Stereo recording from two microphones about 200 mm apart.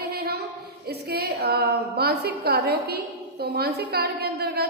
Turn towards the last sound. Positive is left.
turn(degrees=-50)  # may be behind; listen again after turning